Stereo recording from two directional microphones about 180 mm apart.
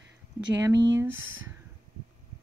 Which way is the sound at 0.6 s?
15° right (ahead or behind).